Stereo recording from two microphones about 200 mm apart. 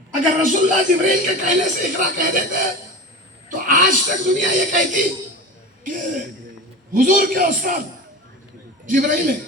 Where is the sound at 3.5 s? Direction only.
40° right (ahead or behind).